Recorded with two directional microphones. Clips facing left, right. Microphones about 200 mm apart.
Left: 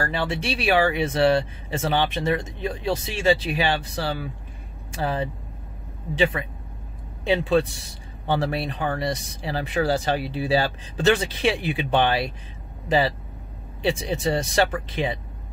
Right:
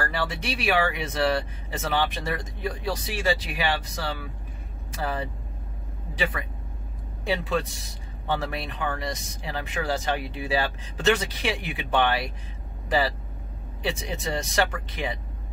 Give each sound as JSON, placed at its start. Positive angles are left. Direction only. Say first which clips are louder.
{"t": 0.0, "sound": "speech", "louder": "left 3 dB", "side_deg": 25}